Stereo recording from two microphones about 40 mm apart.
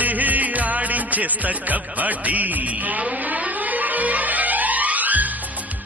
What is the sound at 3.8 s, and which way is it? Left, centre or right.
Music, right.